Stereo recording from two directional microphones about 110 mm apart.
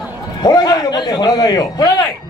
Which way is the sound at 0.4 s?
40° left (ahead or behind).